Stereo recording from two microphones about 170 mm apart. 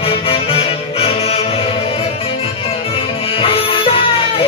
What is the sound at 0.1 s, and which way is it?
Music, 35° left (ahead or behind).